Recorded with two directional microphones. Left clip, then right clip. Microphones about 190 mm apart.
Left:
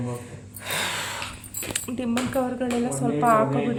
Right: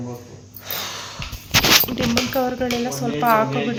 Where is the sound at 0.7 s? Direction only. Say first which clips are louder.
Left 2 dB; 35° left (ahead or behind).